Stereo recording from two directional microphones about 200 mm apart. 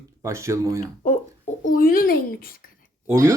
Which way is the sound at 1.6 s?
45° left (ahead or behind).